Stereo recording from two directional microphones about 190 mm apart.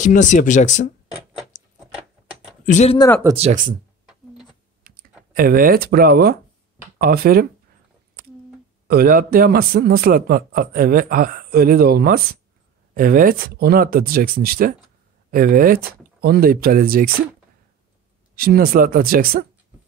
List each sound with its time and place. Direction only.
0.0 s speech: 40° left (ahead or behind)
1.8 s a sound: 5° right (ahead or behind)
2.6 s speech: 40° left (ahead or behind)
3.3 s speech: 40° right (ahead or behind)
4.1 s a sound: 5° right (ahead or behind)
4.8 s a man's voice: 50° right (ahead or behind)
8.8 s a man's voice: 55° right (ahead or behind)
18.3 s a man's voice: 50° right (ahead or behind)